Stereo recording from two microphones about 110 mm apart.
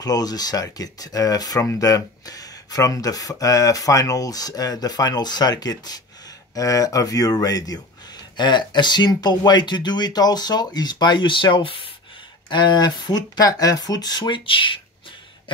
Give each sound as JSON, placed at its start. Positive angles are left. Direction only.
{"t": 0.0, "sound": "speech", "side_deg": 35}